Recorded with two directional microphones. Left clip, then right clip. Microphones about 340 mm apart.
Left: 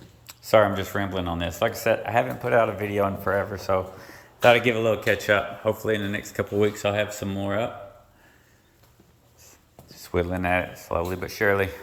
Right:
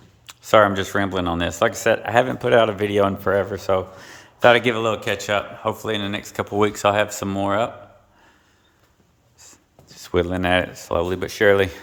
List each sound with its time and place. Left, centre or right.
0.4 s a man's voice: centre
10.0 s speech: centre